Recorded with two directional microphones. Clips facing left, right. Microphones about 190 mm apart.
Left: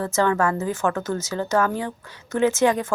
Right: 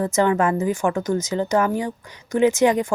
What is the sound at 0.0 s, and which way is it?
Speech, 15° right (ahead or behind).